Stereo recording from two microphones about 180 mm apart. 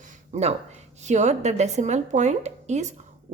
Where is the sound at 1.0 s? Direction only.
40° right (ahead or behind).